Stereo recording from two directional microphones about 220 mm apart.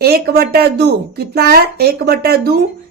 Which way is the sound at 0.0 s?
45° right (ahead or behind).